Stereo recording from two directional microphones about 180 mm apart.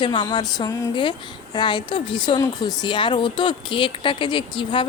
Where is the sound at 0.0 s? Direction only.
25° left (ahead or behind).